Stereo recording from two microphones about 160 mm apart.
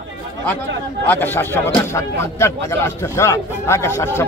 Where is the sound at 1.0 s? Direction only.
10° left (ahead or behind).